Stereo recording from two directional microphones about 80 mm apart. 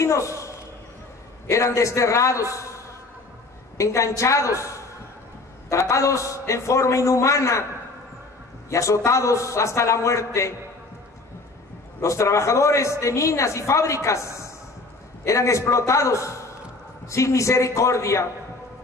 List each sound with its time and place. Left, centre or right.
0.0 s a man's voice: left
3.7 s a man's voice: left
8.6 s a man's voice: left
12.0 s a man's voice: left